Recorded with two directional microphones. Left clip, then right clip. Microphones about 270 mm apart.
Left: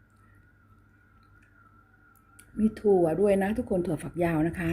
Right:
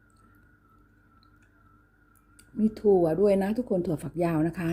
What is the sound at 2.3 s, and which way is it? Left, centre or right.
Speech, centre.